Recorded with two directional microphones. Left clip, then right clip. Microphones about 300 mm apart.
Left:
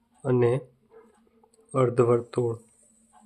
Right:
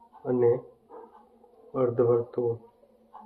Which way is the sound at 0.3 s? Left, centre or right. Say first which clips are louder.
Even; left.